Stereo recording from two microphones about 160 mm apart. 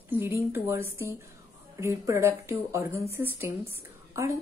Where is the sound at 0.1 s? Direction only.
15° right (ahead or behind).